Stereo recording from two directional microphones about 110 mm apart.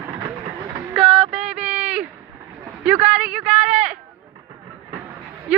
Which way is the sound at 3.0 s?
90° right.